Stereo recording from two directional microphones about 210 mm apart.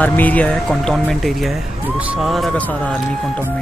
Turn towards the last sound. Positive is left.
turn(degrees=5)  # may be behind; listen again after turning